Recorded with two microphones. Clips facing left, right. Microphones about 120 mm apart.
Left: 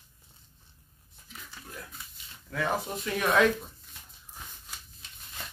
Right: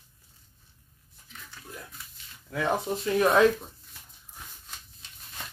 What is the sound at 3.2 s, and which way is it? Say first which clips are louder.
Speech: right 3 dB; 30° right (ahead or behind).